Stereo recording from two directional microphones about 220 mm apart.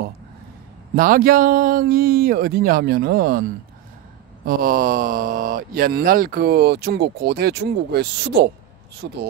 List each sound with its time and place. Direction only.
0.9 s speech: 40° right (ahead or behind)
4.5 s speech: 40° right (ahead or behind)